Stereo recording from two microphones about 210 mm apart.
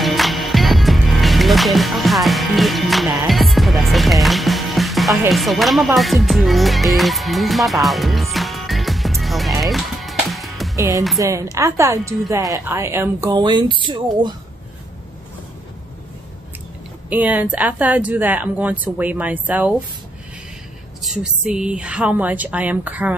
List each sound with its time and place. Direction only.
0.0 s music: centre (ahead or behind)
5.3 s speech: centre (ahead or behind)
5.9 s music: centre (ahead or behind)
10.8 s speech: 15° right (ahead or behind)
17.1 s speech: 5° right (ahead or behind)
21.0 s speech: 5° right (ahead or behind)